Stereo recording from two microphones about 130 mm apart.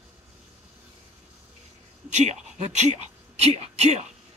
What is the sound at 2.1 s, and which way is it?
Speech, 60° right (ahead or behind).